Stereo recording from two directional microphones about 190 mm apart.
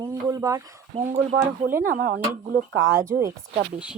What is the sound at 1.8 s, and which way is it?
Speech, 50° right (ahead or behind).